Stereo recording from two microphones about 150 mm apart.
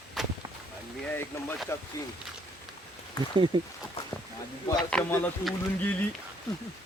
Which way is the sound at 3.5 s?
30° right (ahead or behind).